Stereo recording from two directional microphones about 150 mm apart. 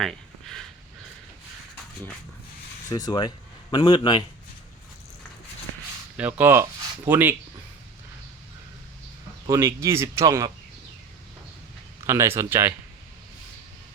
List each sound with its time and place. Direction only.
0.0 s speech: centre (ahead or behind)
2.9 s speech: 25° left (ahead or behind)
6.1 s speech: 10° right (ahead or behind)
9.5 s speech: 20° right (ahead or behind)
12.0 s speech: 20° right (ahead or behind)